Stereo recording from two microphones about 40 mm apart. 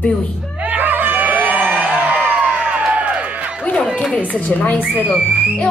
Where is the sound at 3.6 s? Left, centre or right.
Left.